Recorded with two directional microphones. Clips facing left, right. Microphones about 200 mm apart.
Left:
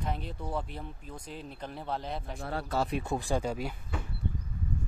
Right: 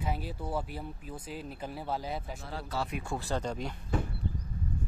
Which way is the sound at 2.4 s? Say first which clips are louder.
Left 7 dB; 55° left (ahead or behind).